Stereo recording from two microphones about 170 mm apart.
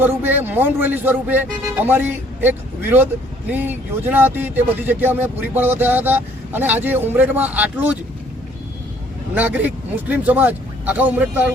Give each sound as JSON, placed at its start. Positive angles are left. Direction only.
{"t": 0.0, "sound": "speech", "side_deg": -10}
{"t": 9.3, "sound": "speech", "side_deg": -10}